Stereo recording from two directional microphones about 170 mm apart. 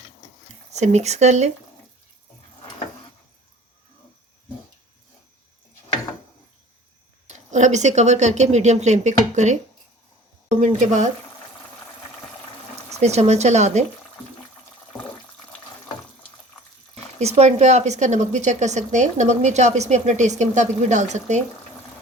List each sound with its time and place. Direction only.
0.7 s speech: 40° right (ahead or behind)
7.3 s speech: 45° right (ahead or behind)
10.6 s speech: 45° right (ahead or behind)
13.0 s speech: 40° right (ahead or behind)
16.9 s speech: 40° right (ahead or behind)